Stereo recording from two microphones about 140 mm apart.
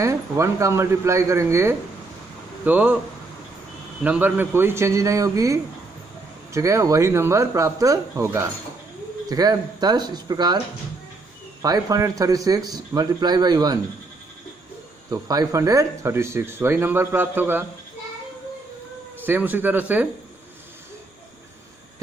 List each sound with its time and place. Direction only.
0.0 s speech: 20° right (ahead or behind)
4.0 s speech: 10° right (ahead or behind); by 10.6 s 30° right (ahead or behind)
11.6 s speech: 25° right (ahead or behind)
15.0 s speech: 25° right (ahead or behind)
19.2 s speech: 15° right (ahead or behind)